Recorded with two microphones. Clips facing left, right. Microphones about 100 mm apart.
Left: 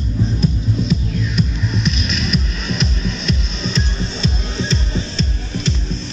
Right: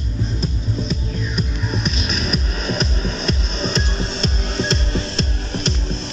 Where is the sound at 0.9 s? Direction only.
45° right (ahead or behind).